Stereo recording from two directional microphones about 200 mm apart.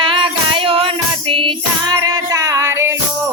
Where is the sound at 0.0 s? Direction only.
25° right (ahead or behind).